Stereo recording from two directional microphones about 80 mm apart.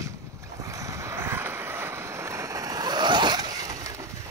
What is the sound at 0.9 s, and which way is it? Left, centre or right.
Vehicle, right.